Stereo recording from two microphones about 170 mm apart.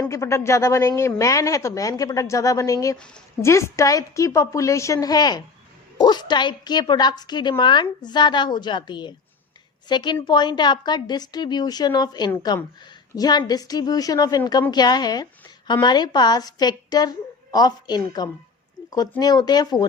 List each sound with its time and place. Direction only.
0.1 s speech: 15° left (ahead or behind)